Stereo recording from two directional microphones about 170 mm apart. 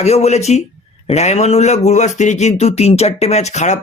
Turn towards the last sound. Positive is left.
turn(degrees=45)  # may be behind; listen again after turning